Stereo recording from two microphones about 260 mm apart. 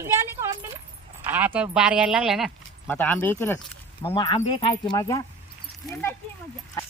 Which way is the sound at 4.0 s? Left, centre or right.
Centre.